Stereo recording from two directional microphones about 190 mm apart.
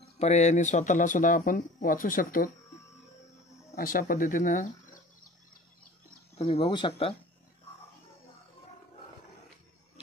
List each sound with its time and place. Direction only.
0.2 s speech: 35° left (ahead or behind)
3.7 s speech: 50° left (ahead or behind)
6.3 s speech: 30° left (ahead or behind)